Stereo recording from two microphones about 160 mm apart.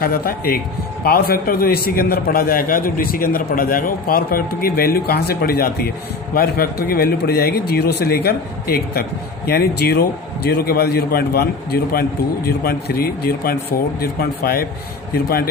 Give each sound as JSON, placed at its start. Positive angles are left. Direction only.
{"t": 0.0, "sound": "a man's voice", "side_deg": 70}